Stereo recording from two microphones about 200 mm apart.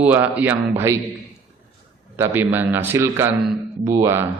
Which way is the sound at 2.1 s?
10° right (ahead or behind).